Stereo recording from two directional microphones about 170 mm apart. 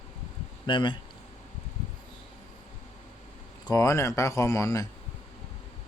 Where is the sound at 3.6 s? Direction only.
20° left (ahead or behind).